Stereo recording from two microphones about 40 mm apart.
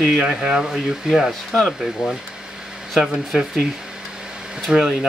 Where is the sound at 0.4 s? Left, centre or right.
Centre.